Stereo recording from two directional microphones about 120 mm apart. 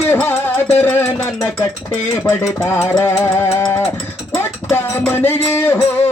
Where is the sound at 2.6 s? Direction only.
20° left (ahead or behind).